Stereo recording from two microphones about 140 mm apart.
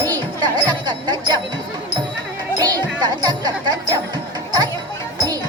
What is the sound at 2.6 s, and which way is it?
Speech, 30° right (ahead or behind).